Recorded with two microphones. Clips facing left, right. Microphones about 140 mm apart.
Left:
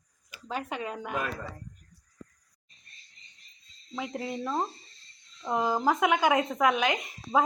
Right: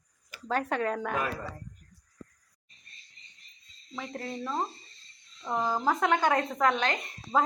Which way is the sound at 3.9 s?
10° left (ahead or behind).